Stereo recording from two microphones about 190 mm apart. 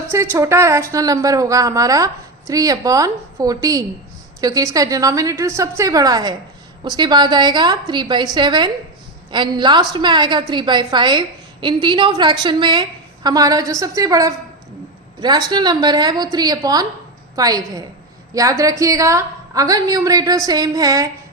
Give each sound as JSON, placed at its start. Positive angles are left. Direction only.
{"t": 0.1, "sound": "a woman's voice", "side_deg": -15}